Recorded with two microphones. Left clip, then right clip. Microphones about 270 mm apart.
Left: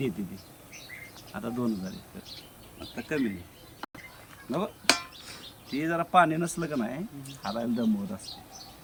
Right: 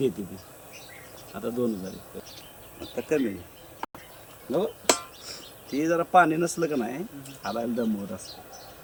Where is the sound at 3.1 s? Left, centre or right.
Centre.